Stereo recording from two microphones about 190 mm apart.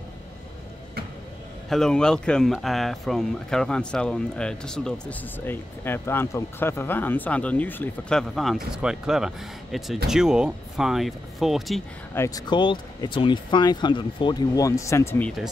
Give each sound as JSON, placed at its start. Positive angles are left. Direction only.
{"t": 1.7, "sound": "speech", "side_deg": 5}
{"t": 12.1, "sound": "speech", "side_deg": 15}